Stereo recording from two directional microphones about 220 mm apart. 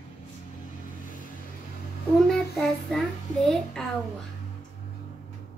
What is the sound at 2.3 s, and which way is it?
Child singing, centre (ahead or behind).